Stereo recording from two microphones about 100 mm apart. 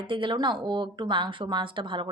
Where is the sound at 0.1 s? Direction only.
55° right (ahead or behind).